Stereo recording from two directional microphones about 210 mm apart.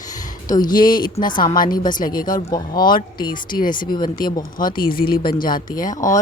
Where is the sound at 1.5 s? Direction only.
40° left (ahead or behind).